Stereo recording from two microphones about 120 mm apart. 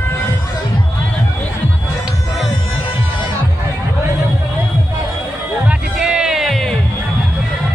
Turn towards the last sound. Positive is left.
turn(degrees=0)  # may be behind; listen again after turning